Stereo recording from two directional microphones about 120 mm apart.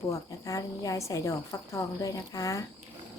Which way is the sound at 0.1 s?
30° left (ahead or behind).